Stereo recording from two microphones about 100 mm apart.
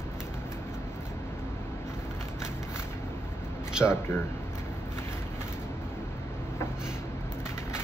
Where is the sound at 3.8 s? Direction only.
25° left (ahead or behind).